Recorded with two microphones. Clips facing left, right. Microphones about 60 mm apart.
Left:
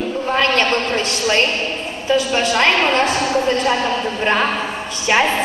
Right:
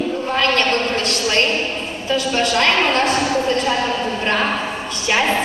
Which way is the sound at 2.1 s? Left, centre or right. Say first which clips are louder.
Left 2 dB; centre.